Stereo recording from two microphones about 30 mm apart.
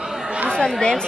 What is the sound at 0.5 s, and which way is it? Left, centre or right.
Speech, left.